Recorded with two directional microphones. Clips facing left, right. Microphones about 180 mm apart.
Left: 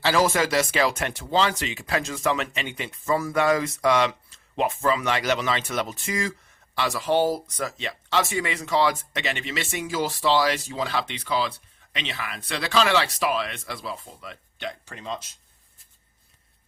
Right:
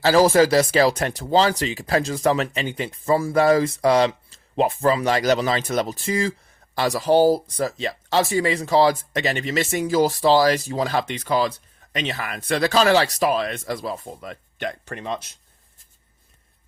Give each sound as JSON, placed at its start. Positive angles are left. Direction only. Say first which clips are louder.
{"t": 0.0, "sound": "speech", "louder": "right 7 dB", "side_deg": -35}